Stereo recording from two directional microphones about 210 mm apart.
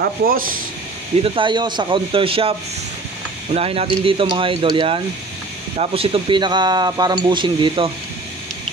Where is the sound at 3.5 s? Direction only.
30° right (ahead or behind).